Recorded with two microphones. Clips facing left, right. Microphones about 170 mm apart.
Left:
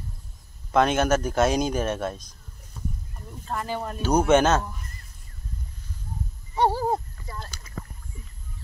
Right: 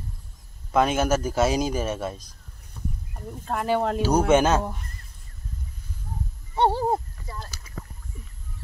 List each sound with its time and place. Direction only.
0.7 s a man's voice: 5° right (ahead or behind)
3.4 s speech: 65° right (ahead or behind); by 4.0 s 80° right
4.0 s speech: 10° right (ahead or behind)
6.5 s a sound: 25° right (ahead or behind)
7.2 s rowboat: 10° right (ahead or behind)